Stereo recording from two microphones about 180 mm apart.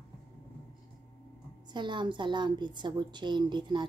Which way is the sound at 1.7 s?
25° right (ahead or behind).